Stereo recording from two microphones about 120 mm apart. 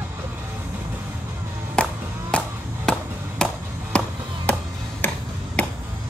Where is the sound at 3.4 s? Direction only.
5° left (ahead or behind).